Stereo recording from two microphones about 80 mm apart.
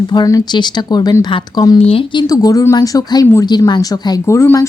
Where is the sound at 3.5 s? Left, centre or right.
Left.